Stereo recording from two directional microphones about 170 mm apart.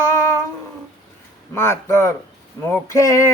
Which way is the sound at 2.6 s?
20° left (ahead or behind).